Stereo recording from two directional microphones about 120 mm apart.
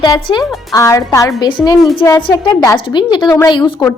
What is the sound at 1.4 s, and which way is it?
Speech, 40° left (ahead or behind).